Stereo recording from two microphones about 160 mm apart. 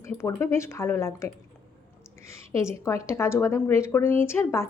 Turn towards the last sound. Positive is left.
turn(degrees=15)  # may be behind; listen again after turning